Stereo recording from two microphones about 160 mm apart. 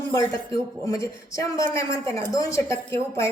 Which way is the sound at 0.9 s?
20° left (ahead or behind).